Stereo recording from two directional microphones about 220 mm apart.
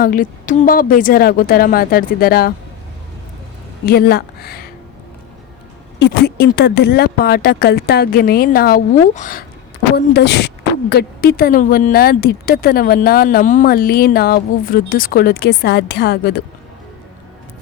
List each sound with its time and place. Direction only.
0.0 s a woman's voice: 40° left (ahead or behind)
3.8 s speech: 45° left (ahead or behind)
6.0 s speech: 45° left (ahead or behind)
9.9 s speech: 50° left (ahead or behind)